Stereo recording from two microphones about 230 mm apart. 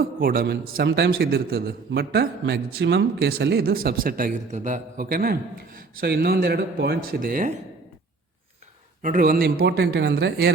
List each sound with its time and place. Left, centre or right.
0.2 s a man's voice: right
9.0 s a man's voice: right